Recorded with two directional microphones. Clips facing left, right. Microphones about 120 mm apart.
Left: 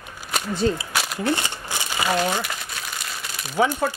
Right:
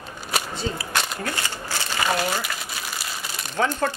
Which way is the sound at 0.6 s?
55° left (ahead or behind).